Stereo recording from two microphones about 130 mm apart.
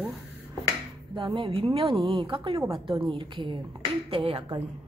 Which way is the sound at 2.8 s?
45° right (ahead or behind).